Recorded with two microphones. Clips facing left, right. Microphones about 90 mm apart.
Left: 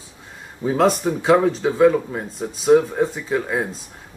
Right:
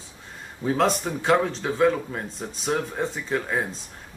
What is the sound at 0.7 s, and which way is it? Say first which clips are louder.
Speech: left 5 dB; 5° left (ahead or behind).